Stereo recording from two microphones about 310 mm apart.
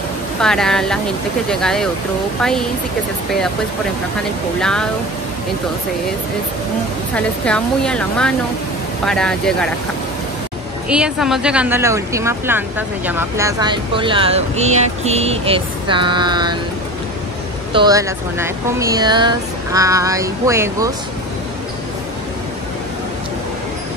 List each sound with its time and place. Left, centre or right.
0.4 s speech: centre
4.6 s speech: centre
7.2 s speech: centre
10.9 s speech: centre
17.7 s speech: centre